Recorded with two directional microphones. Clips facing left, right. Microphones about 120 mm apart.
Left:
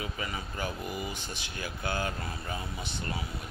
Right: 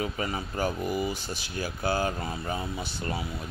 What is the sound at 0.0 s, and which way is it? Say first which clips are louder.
Speech: right 6 dB; 40° right (ahead or behind).